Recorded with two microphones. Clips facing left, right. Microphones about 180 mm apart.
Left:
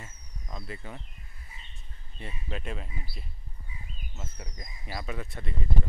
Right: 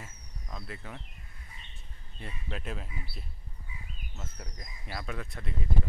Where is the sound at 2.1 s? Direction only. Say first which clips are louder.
Left 2 dB; centre (ahead or behind).